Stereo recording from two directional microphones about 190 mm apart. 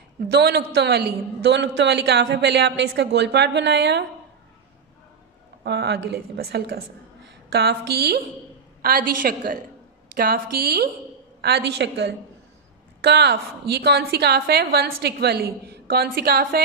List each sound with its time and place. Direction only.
0.3 s a man's voice: 60° right (ahead or behind)
5.6 s a man's voice: 60° right (ahead or behind)